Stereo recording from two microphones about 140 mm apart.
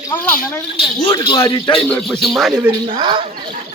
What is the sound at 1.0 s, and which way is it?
Speech, 35° left (ahead or behind).